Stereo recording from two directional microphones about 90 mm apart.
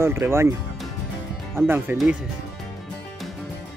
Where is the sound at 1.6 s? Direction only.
30° right (ahead or behind).